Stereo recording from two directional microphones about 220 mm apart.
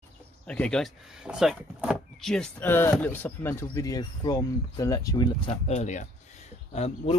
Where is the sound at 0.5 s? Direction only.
5° left (ahead or behind).